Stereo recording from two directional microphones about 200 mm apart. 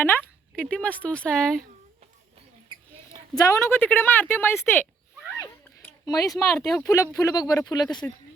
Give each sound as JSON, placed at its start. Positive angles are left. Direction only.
{"t": 0.0, "sound": "speech", "side_deg": 10}
{"t": 3.3, "sound": "speech", "side_deg": 15}
{"t": 5.4, "sound": "a sound", "side_deg": 15}
{"t": 6.7, "sound": "speech", "side_deg": 15}